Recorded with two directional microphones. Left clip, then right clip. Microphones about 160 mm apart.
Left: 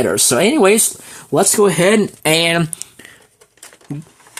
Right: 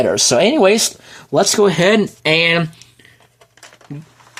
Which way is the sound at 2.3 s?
40° left (ahead or behind).